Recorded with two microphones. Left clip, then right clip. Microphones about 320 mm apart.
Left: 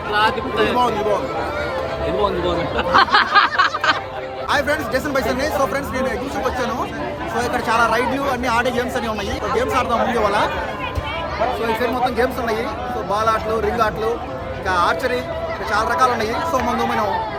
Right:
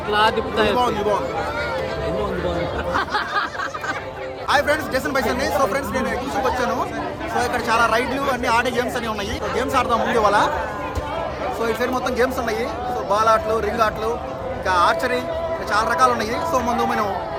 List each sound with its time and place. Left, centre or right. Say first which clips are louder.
0.1 s a man's voice: even; right
0.8 s speech: left 2 dB; centre
2.9 s a sound: left 10 dB; left
4.4 s speech: right 1 dB; centre
11.6 s speech: right 1 dB; centre